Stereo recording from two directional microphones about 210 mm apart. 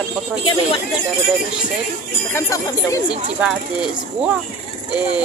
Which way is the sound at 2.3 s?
15° left (ahead or behind).